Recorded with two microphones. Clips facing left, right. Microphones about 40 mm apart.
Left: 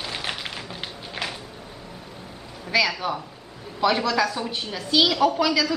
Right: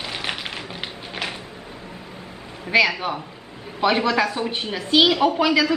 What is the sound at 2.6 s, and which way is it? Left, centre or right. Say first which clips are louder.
A woman's voice: right 4 dB; right.